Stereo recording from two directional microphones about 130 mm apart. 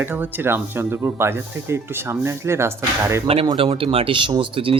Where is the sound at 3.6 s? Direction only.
45° right (ahead or behind).